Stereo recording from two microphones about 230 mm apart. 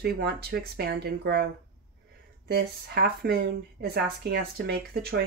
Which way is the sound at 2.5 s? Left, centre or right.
Right.